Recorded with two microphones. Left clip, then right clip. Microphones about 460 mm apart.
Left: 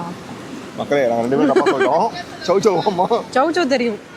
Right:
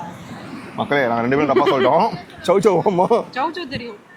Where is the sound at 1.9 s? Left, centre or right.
Right.